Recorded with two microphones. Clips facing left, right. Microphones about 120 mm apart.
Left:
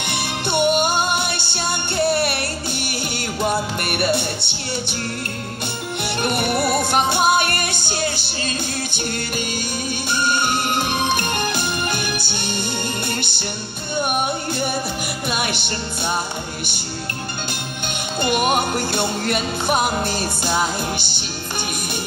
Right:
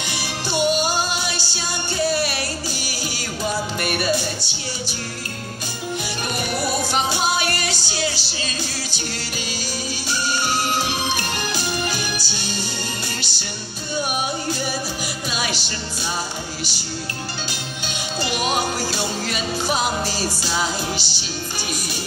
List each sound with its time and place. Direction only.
0.0 s music: 60° left (ahead or behind)
6.2 s music: 60° left (ahead or behind)
10.0 s music: 55° left (ahead or behind)
15.3 s music: 60° left (ahead or behind)
18.2 s music: 55° left (ahead or behind)